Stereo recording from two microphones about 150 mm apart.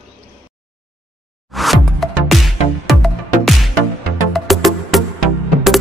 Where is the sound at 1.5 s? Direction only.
Centre (ahead or behind).